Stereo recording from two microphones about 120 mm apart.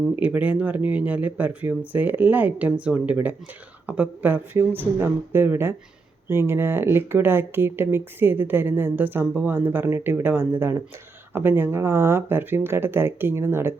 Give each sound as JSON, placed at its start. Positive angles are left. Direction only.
{"t": 0.2, "sound": "speech", "side_deg": -10}